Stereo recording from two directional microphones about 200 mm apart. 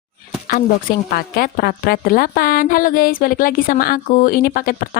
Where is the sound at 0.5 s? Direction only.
45° left (ahead or behind).